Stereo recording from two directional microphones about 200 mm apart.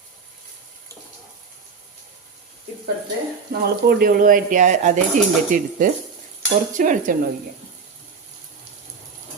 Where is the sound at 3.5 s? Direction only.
45° right (ahead or behind).